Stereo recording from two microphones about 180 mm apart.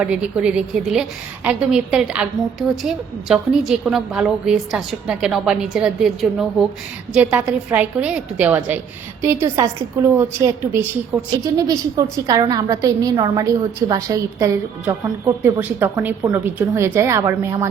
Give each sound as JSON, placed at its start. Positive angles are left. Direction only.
{"t": 0.0, "sound": "a woman's voice", "side_deg": -5}